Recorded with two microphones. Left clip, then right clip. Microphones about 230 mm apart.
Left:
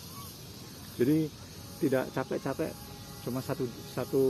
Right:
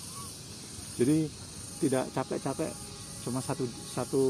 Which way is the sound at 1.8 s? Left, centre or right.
Right.